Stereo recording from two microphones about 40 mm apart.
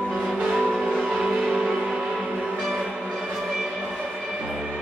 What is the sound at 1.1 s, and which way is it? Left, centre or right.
Music, right.